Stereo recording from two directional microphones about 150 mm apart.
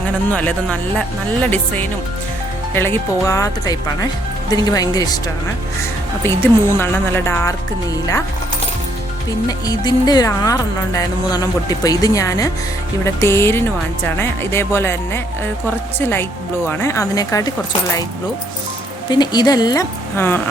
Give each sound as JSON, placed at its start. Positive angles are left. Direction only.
{"t": 0.3, "sound": "speech", "side_deg": 10}
{"t": 6.2, "sound": "speech", "side_deg": 15}
{"t": 9.5, "sound": "speech", "side_deg": 25}
{"t": 19.1, "sound": "speech", "side_deg": 30}